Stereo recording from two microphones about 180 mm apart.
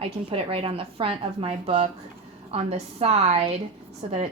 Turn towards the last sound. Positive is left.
turn(degrees=-35)  # may be behind; listen again after turning